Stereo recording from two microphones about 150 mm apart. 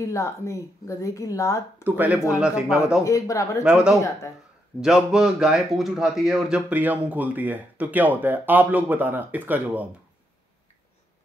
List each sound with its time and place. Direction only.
0.0 s speech: 20° left (ahead or behind)
1.8 s a man's voice: 10° right (ahead or behind)
3.0 s speech: 20° left (ahead or behind)
3.6 s a man's voice: 5° right (ahead or behind)